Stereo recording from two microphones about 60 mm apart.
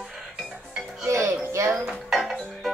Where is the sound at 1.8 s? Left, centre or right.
Centre.